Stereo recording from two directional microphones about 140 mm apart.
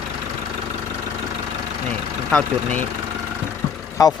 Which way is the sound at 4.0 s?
25° left (ahead or behind).